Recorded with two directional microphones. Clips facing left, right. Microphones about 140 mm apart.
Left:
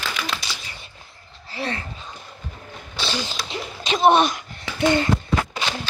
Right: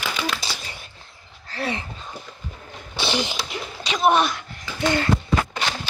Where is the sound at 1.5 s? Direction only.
10° left (ahead or behind).